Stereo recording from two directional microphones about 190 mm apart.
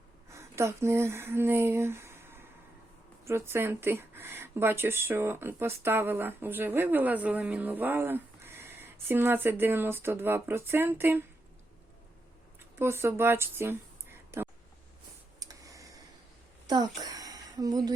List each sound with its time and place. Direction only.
0.3 s speech: 15° right (ahead or behind)
12.8 s speech: 15° right (ahead or behind)
15.4 s tick-tock: 20° right (ahead or behind)
17.0 s a sound: 20° right (ahead or behind)